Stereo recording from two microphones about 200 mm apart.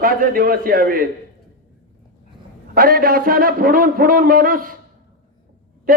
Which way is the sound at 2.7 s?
45° right (ahead or behind).